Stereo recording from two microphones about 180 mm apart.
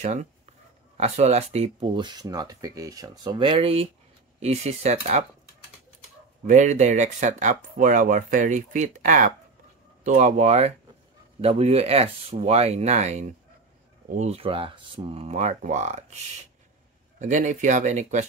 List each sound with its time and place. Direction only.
0.0 s speech: 40° right (ahead or behind)
6.4 s speech: 40° right (ahead or behind)
17.2 s speech: 45° right (ahead or behind)